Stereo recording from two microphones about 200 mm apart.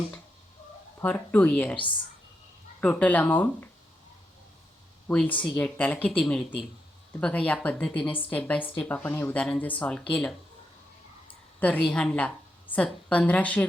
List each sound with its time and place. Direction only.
0.9 s speech: 10° left (ahead or behind)
2.8 s speech: 5° left (ahead or behind)
5.0 s speech: 5° left (ahead or behind)
8.0 s speech: 25° left (ahead or behind)
8.3 s speech: 5° left (ahead or behind)
11.6 s a woman's voice: 5° left (ahead or behind)